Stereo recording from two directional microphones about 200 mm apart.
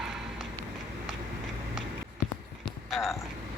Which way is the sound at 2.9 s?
Centre (ahead or behind).